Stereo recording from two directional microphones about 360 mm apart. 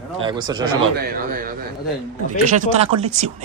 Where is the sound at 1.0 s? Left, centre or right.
Right.